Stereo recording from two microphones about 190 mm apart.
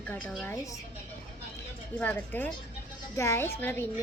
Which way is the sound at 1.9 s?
10° left (ahead or behind).